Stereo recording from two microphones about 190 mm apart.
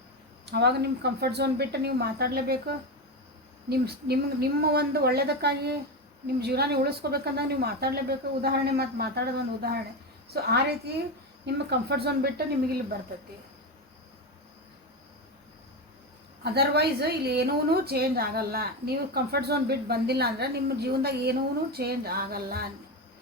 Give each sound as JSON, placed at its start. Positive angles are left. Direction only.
{"t": 0.4, "sound": "a woman's voice", "side_deg": -60}
{"t": 3.7, "sound": "a woman's voice", "side_deg": -55}
{"t": 16.4, "sound": "a woman's voice", "side_deg": -60}